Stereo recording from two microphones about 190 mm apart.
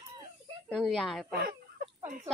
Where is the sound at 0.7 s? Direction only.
Centre (ahead or behind).